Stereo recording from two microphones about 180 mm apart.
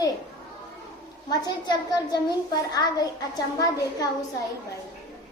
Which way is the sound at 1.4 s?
25° left (ahead or behind).